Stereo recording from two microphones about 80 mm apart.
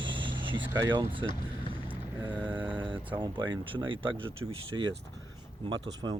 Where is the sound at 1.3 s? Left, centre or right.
Left.